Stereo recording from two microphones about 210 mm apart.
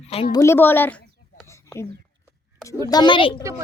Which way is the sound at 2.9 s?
20° left (ahead or behind).